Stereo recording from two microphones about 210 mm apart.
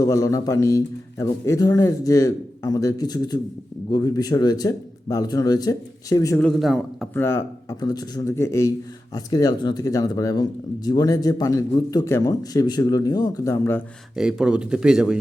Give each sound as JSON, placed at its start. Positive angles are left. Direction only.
{"t": 0.0, "sound": "a man's voice", "side_deg": 15}
{"t": 6.4, "sound": "speech", "side_deg": 0}
{"t": 7.1, "sound": "a man's voice", "side_deg": 10}
{"t": 14.2, "sound": "speech", "side_deg": -5}